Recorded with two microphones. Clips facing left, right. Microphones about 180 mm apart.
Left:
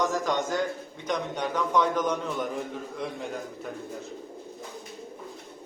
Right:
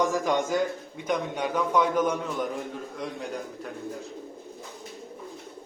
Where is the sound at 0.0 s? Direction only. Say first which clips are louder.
Right 2 dB; 10° right (ahead or behind).